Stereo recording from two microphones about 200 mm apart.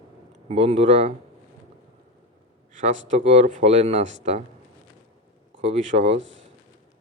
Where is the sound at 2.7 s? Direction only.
35° right (ahead or behind).